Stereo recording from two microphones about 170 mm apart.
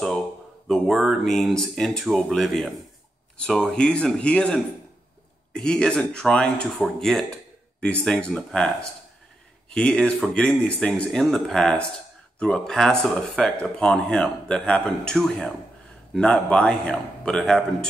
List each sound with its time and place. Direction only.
0.7 s speech: centre (ahead or behind)